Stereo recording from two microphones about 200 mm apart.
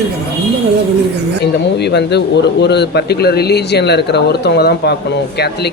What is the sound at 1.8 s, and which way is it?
A man's voice, 55° left (ahead or behind).